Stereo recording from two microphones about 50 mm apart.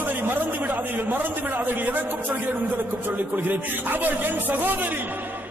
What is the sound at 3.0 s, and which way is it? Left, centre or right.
A man's voice, right.